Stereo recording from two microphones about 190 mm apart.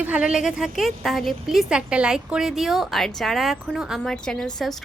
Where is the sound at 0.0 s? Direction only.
5° right (ahead or behind).